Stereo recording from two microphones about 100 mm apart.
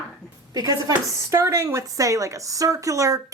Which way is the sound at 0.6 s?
40° right (ahead or behind).